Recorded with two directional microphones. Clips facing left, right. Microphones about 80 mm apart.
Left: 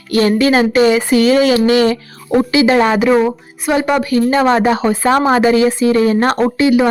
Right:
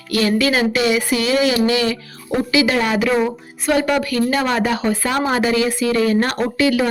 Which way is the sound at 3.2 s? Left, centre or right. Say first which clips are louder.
Left 3 dB; left.